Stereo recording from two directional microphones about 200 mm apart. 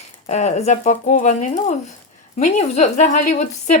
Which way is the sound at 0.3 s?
35° left (ahead or behind).